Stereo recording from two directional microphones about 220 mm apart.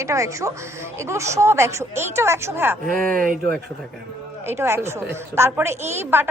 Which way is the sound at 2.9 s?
35° right (ahead or behind).